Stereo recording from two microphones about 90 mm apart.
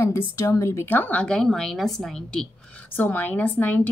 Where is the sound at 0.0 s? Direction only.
35° left (ahead or behind); by 2.4 s 5° left (ahead or behind).